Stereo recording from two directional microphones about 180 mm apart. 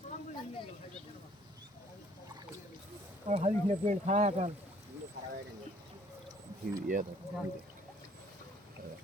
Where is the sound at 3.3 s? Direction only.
40° right (ahead or behind).